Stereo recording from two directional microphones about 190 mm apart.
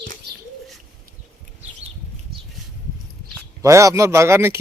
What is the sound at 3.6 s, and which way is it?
Speech, 15° right (ahead or behind).